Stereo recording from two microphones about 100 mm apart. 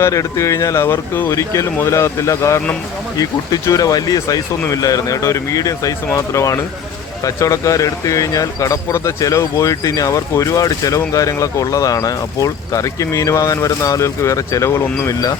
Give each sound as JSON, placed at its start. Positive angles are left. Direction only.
{"t": 0.0, "sound": "speech", "side_deg": 30}